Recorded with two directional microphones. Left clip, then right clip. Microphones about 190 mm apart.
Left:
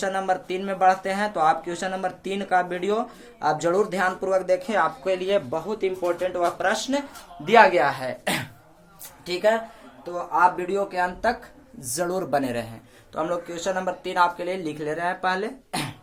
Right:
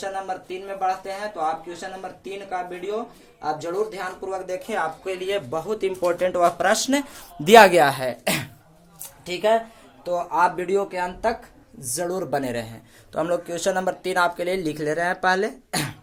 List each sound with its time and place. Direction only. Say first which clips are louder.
0.0 s speech: left 4 dB; 45° left (ahead or behind)
5.5 s speech: right 1 dB; centre (ahead or behind)
6.1 s speech: right 4 dB; 35° right (ahead or behind)
7.4 s speech: right 4 dB; 70° right (ahead or behind); by 8.1 s 55° right (ahead or behind)
8.2 s speech: right 2 dB; 25° right (ahead or behind)
9.2 s speech: right 1 dB; 5° right (ahead or behind)
13.1 s speech: right 3 dB; 30° right (ahead or behind)